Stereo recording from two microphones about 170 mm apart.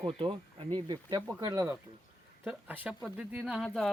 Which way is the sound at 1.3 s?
20° right (ahead or behind).